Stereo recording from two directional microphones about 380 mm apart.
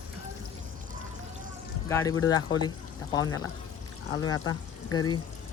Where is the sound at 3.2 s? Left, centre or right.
Left.